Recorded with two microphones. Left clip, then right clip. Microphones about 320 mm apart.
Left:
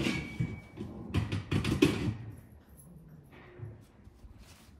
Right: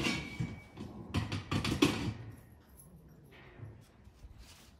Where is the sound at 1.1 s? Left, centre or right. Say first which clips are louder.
Left 1 dB; centre.